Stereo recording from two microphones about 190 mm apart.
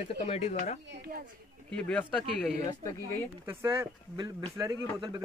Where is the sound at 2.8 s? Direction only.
15° left (ahead or behind).